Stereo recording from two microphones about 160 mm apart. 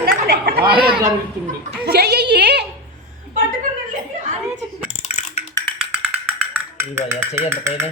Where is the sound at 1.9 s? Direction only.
90° right.